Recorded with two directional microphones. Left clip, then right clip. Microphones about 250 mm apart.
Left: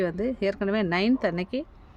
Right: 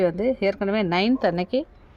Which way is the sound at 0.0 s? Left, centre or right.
Centre.